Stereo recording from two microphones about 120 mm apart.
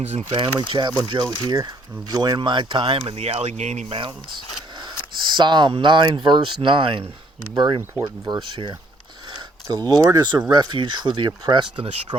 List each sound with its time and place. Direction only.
0.1 s speech: 55° right (ahead or behind); by 3.9 s 75° right (ahead or behind)
4.8 s speech: 40° right (ahead or behind)
9.3 s a sound: 35° right (ahead or behind)
9.9 s speech: 30° right (ahead or behind)